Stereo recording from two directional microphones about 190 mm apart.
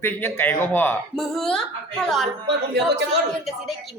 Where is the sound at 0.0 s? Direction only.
10° left (ahead or behind).